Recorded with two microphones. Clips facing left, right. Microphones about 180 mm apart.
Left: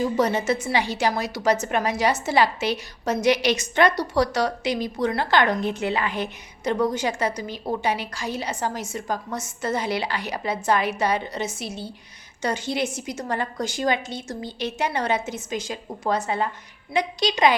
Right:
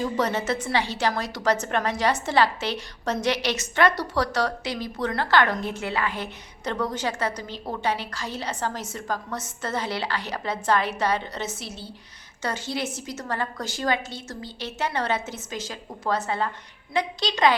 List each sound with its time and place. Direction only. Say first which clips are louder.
0.0 s a woman's voice: left 3 dB; 15° left (ahead or behind)